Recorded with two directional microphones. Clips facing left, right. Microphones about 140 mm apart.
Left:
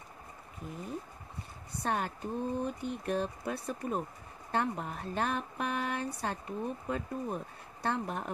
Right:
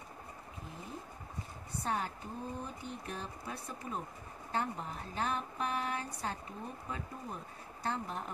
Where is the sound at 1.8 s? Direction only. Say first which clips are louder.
Left 3 dB; 70° left (ahead or behind).